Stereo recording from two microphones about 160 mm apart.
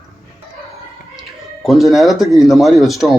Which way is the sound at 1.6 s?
Centre (ahead or behind).